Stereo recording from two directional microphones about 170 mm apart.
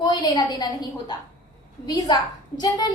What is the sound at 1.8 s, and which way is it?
A woman's voice, 20° left (ahead or behind).